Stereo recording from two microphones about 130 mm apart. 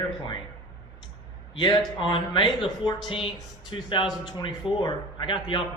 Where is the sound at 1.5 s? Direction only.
35° left (ahead or behind).